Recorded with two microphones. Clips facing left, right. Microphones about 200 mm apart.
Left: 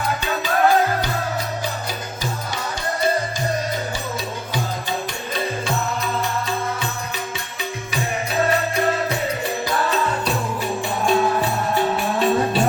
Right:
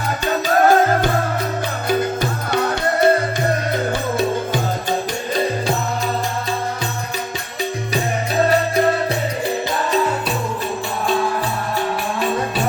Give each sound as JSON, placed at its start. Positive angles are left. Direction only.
{"t": 0.3, "sound": "music", "side_deg": -40}
{"t": 2.5, "sound": "music", "side_deg": -60}